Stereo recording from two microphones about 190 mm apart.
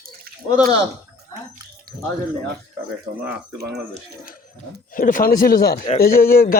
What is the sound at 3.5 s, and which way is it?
Speech, 60° right (ahead or behind).